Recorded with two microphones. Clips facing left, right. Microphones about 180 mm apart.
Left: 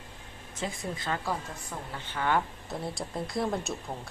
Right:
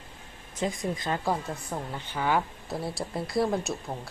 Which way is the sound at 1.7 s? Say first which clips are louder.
Right 5 dB; 40° right (ahead or behind).